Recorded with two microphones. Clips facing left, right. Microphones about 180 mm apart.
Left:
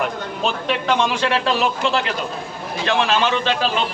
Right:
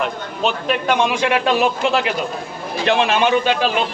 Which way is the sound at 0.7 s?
10° right (ahead or behind).